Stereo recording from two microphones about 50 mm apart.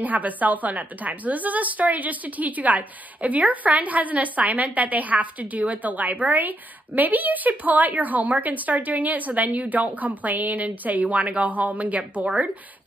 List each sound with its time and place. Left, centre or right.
0.0 s a woman's voice: right